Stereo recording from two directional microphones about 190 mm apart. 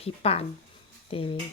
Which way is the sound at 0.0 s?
30° left (ahead or behind).